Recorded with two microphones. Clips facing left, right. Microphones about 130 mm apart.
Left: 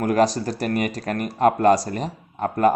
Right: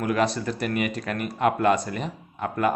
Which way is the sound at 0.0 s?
40° left (ahead or behind).